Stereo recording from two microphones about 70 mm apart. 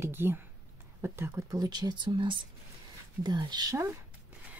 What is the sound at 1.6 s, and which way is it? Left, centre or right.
Speech, right.